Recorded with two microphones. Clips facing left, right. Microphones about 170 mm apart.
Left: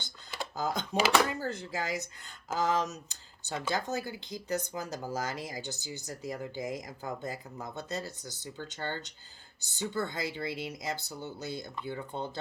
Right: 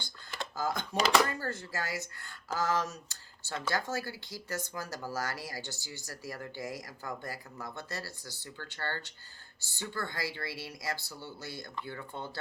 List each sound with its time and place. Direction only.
0.5 s speech: 20° left (ahead or behind)
0.9 s speech: 5° left (ahead or behind)
1.3 s speech: 15° left (ahead or behind)